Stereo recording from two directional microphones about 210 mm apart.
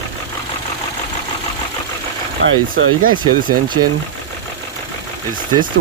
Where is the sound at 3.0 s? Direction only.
40° right (ahead or behind).